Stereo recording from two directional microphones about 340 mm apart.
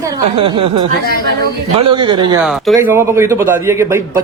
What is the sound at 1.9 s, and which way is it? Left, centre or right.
Speech, centre.